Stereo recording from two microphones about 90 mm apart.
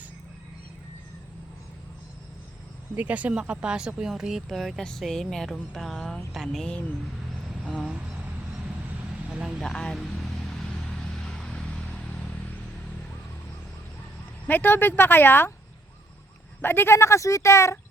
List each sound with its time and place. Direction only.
2.9 s speech: 15° right (ahead or behind); by 6.7 s 5° left (ahead or behind)
7.6 s a sound: 10° right (ahead or behind)
9.3 s speech: 10° right (ahead or behind)
9.6 s vehicle: 5° left (ahead or behind)
14.4 s speech: 20° left (ahead or behind)
16.6 s speech: 25° left (ahead or behind)